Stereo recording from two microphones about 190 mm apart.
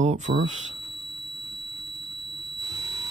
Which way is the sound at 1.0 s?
20° right (ahead or behind).